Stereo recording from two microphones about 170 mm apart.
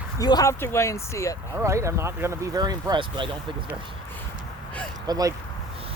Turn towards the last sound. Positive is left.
turn(degrees=-20)  # may be behind; listen again after turning